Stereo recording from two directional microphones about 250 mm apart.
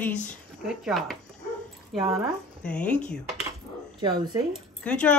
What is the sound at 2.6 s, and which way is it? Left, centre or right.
Speech, centre.